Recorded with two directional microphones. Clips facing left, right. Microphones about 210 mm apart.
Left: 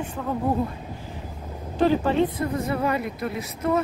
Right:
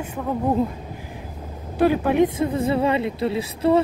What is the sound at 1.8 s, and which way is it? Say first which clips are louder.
Speech: right 3 dB; 10° right (ahead or behind).